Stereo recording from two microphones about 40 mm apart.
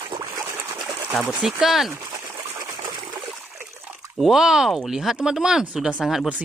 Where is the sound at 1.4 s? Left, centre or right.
Centre.